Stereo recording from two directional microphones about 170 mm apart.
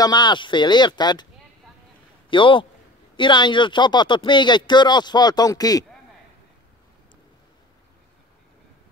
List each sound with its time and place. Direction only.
0.0 s speech: 25° left (ahead or behind)
2.2 s a man's voice: 30° left (ahead or behind)